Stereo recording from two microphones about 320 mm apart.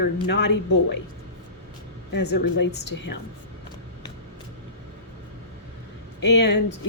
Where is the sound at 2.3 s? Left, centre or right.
Left.